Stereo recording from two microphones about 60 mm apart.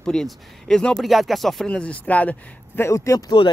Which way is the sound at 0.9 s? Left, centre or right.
Centre.